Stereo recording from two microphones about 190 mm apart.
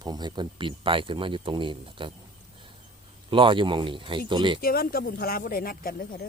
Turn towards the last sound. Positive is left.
turn(degrees=50)  # may be behind; listen again after turning